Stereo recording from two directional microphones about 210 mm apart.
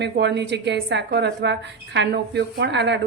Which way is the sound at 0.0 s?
55° right (ahead or behind).